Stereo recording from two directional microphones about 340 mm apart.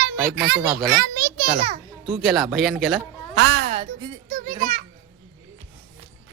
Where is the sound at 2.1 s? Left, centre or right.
Centre.